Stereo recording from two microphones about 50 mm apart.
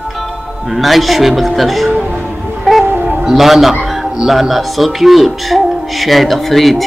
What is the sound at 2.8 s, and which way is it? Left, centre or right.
Music, right.